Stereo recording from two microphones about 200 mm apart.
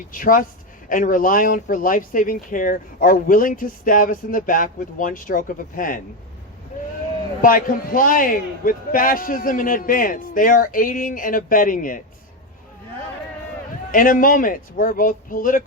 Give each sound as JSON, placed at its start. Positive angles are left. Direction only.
{"t": 0.1, "sound": "speech", "side_deg": 45}
{"t": 7.4, "sound": "speech", "side_deg": 45}
{"t": 13.9, "sound": "speech", "side_deg": 45}